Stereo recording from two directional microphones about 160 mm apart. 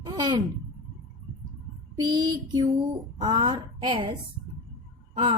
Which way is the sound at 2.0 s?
25° right (ahead or behind).